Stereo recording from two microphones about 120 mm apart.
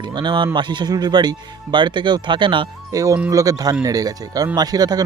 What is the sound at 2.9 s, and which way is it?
Speech, 30° right (ahead or behind).